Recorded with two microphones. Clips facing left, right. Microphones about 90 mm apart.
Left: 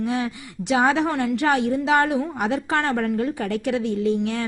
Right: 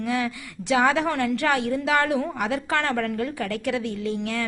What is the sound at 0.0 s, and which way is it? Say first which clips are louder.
A woman's voice: left 1 dB; 25° left (ahead or behind).